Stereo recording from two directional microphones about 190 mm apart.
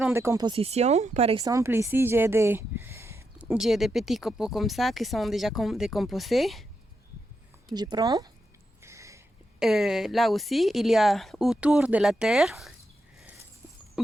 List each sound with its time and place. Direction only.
0.0 s speech: 15° right (ahead or behind); by 1.4 s 35° right (ahead or behind)
1.4 s speech: 15° right (ahead or behind); by 6.7 s centre (ahead or behind)
7.7 s a woman's voice: 20° right (ahead or behind)
8.8 s a sound: 15° right (ahead or behind)
9.6 s speech: 5° right (ahead or behind)